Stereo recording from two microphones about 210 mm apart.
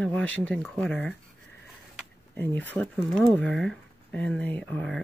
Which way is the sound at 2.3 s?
10° left (ahead or behind).